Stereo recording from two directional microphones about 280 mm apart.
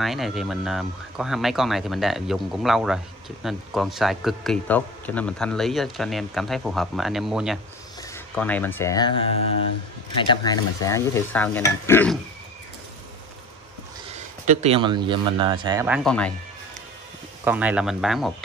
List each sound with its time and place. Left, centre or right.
0.0 s speech: centre
10.3 s speech: centre
14.1 s speech: right; by 16.3 s centre
17.5 s speech: centre